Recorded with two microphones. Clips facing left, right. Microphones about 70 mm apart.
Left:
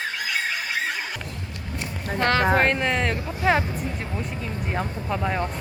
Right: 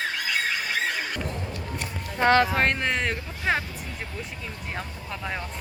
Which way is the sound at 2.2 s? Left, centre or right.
Centre.